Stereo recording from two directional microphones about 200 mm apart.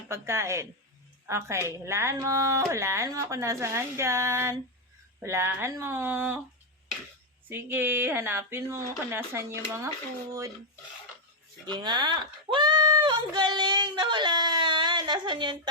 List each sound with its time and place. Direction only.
0.1 s speech: 15° right (ahead or behind)
7.5 s speech: 10° right (ahead or behind)
11.6 s speech: 20° right (ahead or behind)